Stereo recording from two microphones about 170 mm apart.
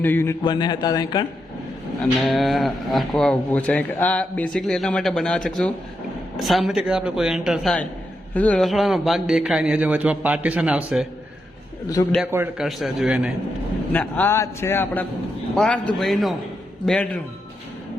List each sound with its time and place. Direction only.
0.0 s a man's voice: 10° left (ahead or behind)
0.4 s a man's voice: 25° left (ahead or behind)
2.1 s speech: centre (ahead or behind)
12.2 s a man's voice: 10° right (ahead or behind)
13.9 s a man's voice: 10° left (ahead or behind)